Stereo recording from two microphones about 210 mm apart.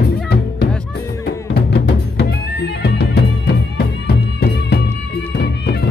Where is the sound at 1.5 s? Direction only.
50° left (ahead or behind).